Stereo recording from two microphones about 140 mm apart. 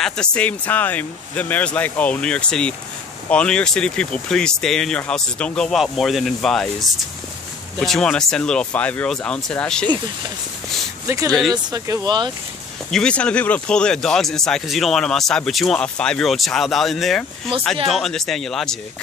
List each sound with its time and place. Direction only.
0.0 s speech: 5° left (ahead or behind)
11.1 s speech: 25° right (ahead or behind)
12.9 s speech: 5° left (ahead or behind)
17.5 s speech: 40° right (ahead or behind)
17.8 s speech: centre (ahead or behind)